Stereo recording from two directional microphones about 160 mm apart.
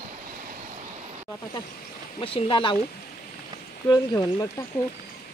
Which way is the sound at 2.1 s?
35° left (ahead or behind).